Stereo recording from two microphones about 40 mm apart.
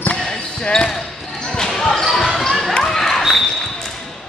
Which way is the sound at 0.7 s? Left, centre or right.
Centre.